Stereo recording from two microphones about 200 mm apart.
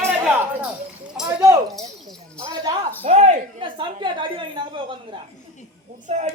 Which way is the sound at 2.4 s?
15° right (ahead or behind).